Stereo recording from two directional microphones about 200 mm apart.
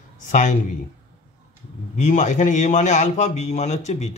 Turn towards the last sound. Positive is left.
turn(degrees=35)  # may be behind; listen again after turning